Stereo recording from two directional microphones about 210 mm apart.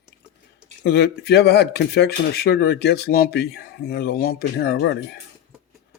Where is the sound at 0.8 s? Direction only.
50° left (ahead or behind).